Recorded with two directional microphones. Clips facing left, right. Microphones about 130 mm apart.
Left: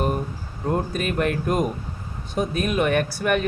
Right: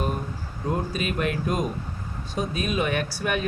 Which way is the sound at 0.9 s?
50° left (ahead or behind).